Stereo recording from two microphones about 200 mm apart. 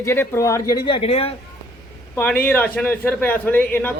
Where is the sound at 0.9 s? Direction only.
25° left (ahead or behind).